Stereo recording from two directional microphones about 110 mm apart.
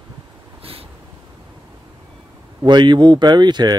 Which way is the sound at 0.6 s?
60° right (ahead or behind).